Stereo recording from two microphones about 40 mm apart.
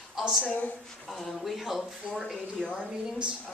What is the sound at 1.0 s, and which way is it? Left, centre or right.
Speech, centre.